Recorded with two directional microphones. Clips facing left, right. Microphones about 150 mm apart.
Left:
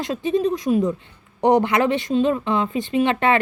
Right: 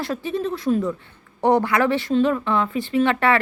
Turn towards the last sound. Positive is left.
turn(degrees=20)  # may be behind; listen again after turning